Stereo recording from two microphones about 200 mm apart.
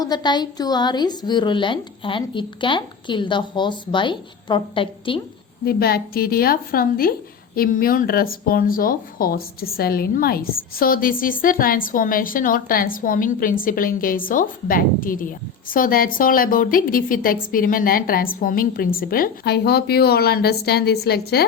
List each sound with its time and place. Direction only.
0.0 s a woman's voice: 20° left (ahead or behind)
5.6 s speech: 50° left (ahead or behind)